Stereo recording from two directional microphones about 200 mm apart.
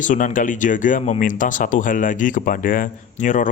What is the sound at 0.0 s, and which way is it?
Speech, 40° left (ahead or behind).